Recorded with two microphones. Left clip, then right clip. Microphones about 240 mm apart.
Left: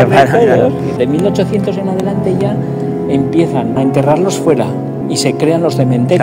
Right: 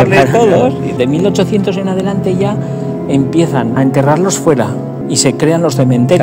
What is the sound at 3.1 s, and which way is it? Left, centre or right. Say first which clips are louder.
Speech: right 1 dB; right.